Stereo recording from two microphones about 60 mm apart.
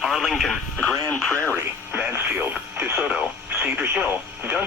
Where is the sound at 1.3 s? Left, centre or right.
Left.